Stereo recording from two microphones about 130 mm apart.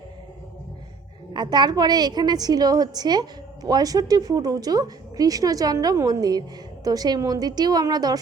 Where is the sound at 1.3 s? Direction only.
35° right (ahead or behind).